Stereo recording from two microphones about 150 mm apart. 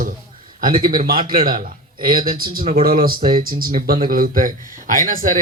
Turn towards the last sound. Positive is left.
turn(degrees=-65)  # may be behind; listen again after turning